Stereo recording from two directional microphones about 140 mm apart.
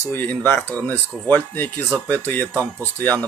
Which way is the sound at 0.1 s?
15° left (ahead or behind).